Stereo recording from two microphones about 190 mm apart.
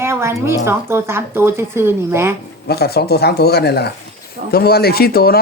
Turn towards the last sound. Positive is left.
turn(degrees=55)  # may be behind; listen again after turning